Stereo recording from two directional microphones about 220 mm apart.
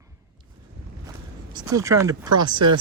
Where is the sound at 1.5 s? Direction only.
15° right (ahead or behind).